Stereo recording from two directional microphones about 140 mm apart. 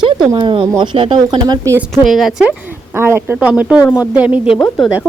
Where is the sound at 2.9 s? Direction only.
20° right (ahead or behind).